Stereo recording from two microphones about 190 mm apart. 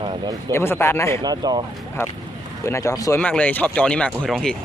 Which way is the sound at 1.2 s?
20° right (ahead or behind).